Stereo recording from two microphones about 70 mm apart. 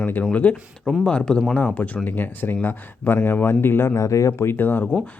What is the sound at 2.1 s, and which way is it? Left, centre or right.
Speech, left.